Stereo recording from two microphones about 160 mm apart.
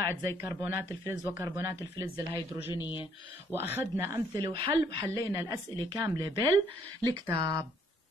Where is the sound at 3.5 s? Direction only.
15° right (ahead or behind).